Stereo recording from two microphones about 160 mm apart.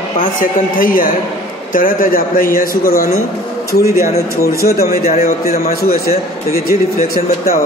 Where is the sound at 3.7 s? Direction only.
75° left (ahead or behind).